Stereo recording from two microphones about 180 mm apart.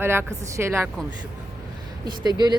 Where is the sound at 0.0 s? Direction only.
15° right (ahead or behind).